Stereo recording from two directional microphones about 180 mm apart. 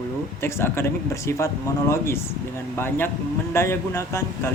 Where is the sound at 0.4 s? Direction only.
15° left (ahead or behind).